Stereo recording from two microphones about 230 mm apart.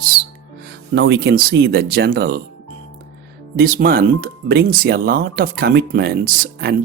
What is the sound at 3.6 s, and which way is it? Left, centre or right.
Speech, right.